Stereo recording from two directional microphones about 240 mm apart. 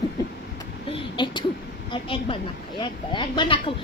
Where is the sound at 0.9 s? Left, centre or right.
Left.